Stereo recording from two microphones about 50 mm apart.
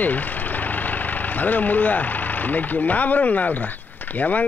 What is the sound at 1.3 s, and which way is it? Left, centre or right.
Speech, left.